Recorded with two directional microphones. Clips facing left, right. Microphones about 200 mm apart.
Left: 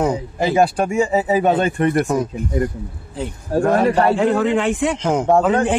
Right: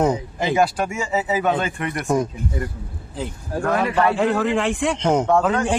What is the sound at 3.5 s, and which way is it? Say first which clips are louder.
Speech: left 5 dB; 30° left (ahead or behind).